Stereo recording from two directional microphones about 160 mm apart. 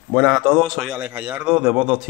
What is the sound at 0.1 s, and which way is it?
Speech, 5° left (ahead or behind).